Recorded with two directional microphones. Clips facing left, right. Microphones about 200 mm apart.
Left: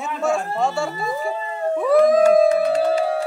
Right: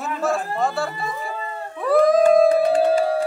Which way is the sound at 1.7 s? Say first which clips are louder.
Left 1 dB; centre (ahead or behind).